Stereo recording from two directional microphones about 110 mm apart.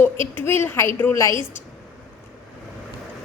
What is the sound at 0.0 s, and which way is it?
A woman's voice, 20° left (ahead or behind).